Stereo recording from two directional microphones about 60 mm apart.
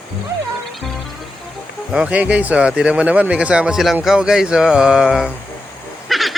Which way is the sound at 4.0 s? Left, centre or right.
Centre.